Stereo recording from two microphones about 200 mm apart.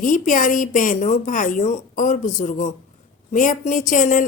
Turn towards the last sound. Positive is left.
turn(degrees=40)  # may be behind; listen again after turning